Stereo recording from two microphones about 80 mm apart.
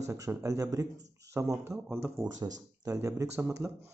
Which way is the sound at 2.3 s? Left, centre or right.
Right.